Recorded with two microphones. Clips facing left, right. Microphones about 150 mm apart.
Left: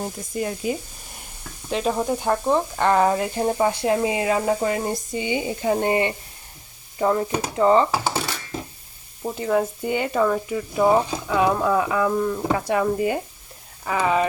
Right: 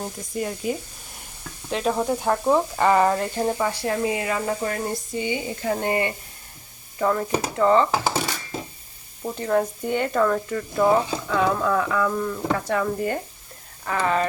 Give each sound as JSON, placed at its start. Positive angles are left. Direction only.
{"t": 0.0, "sound": "speech", "side_deg": 0}
{"t": 3.4, "sound": "speech", "side_deg": 20}
{"t": 9.2, "sound": "speech", "side_deg": 5}